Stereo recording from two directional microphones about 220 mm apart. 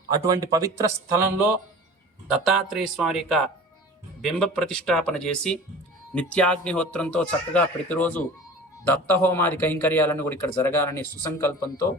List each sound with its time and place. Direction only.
0.3 s speech: 15° right (ahead or behind)
2.2 s a man's voice: centre (ahead or behind)